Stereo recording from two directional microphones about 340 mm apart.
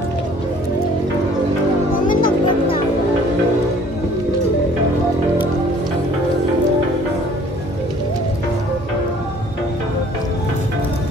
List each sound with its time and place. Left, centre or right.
2.0 s music: left